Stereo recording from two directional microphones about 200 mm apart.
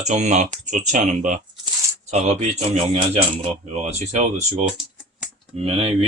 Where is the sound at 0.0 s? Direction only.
35° right (ahead or behind).